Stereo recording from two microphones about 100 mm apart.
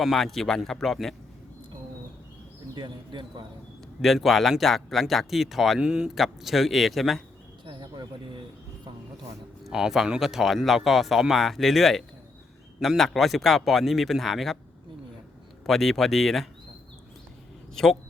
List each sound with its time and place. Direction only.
0.0 s speech: centre (ahead or behind)
2.7 s speech: 50° right (ahead or behind)
4.0 s speech: centre (ahead or behind)
7.6 s a sound: 50° right (ahead or behind)
9.6 s speech: 5° right (ahead or behind)
15.6 s speech: centre (ahead or behind)
17.8 s speech: 5° left (ahead or behind)